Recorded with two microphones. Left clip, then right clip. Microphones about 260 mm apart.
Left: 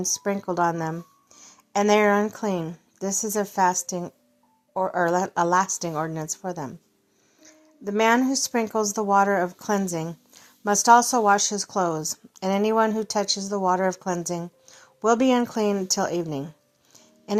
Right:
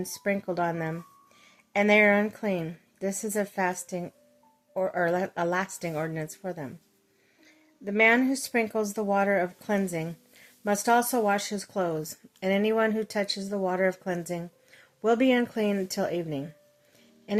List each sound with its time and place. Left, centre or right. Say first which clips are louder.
0.0 s a woman's voice: left 3 dB; centre
7.4 s music: left 4 dB; centre
8.5 s a woman's voice: left 2 dB; centre